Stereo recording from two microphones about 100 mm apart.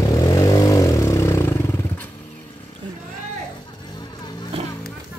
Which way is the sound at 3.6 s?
45° left (ahead or behind).